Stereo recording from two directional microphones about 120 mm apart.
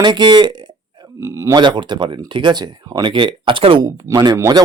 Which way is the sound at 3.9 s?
30° right (ahead or behind).